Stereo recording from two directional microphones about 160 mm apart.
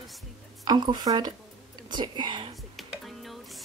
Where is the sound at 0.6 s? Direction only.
25° right (ahead or behind).